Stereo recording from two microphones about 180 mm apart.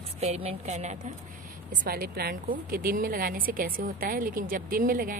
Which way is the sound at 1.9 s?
55° right (ahead or behind).